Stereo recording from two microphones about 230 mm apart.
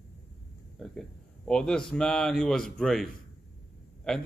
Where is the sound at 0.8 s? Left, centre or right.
Centre.